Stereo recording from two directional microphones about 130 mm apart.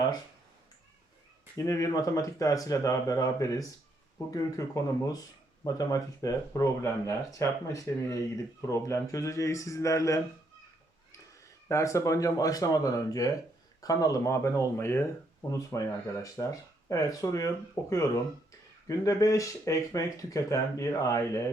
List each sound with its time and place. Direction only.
1.5 s speech: 25° left (ahead or behind)
11.7 s speech: 25° left (ahead or behind)